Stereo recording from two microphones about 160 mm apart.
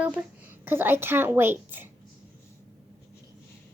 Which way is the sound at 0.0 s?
5° right (ahead or behind).